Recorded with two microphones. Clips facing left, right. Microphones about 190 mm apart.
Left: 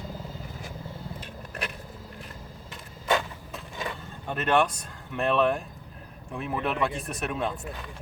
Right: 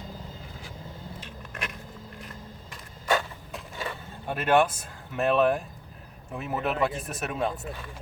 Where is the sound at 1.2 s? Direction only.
35° left (ahead or behind).